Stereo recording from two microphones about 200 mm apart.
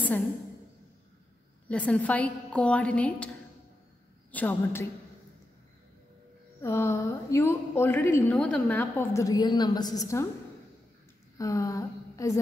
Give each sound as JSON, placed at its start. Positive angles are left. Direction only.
{"t": 1.7, "sound": "a woman's voice", "side_deg": 5}
{"t": 4.3, "sound": "a woman's voice", "side_deg": 10}
{"t": 6.6, "sound": "a woman's voice", "side_deg": 15}
{"t": 11.3, "sound": "speech", "side_deg": 15}